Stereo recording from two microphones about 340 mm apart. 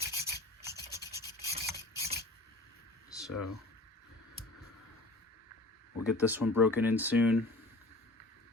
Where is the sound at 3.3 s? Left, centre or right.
Left.